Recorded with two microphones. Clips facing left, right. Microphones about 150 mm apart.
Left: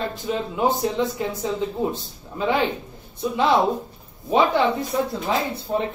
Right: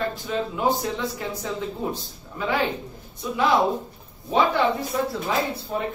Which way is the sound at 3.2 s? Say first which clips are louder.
Left 2 dB; 25° left (ahead or behind).